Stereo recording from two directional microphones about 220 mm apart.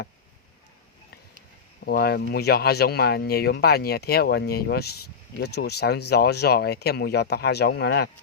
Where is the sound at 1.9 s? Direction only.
45° left (ahead or behind).